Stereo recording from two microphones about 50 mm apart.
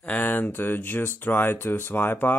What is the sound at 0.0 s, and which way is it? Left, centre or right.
Speech, left.